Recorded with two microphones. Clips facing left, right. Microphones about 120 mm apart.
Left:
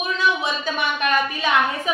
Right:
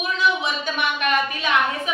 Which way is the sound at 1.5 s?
Centre (ahead or behind).